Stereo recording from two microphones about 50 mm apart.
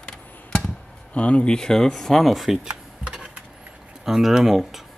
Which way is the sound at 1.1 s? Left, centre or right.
Left.